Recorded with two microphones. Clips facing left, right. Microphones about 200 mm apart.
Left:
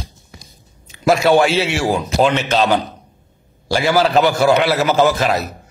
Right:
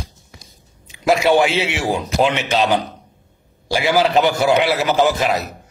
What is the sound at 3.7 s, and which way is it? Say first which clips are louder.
A man's voice: left 1 dB; 15° right (ahead or behind).